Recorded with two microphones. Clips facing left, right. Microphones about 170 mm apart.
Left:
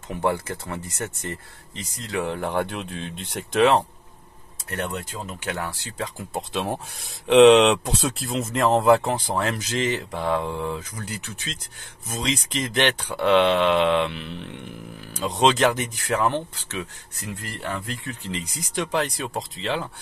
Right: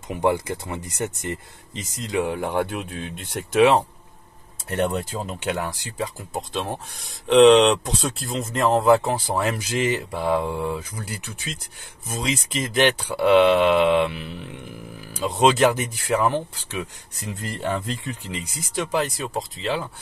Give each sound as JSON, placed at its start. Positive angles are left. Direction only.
{"t": 0.1, "sound": "speech", "side_deg": -15}
{"t": 4.6, "sound": "speech", "side_deg": -30}
{"t": 5.4, "sound": "speech", "side_deg": -15}
{"t": 6.1, "sound": "speech", "side_deg": 5}
{"t": 18.2, "sound": "speech", "side_deg": -10}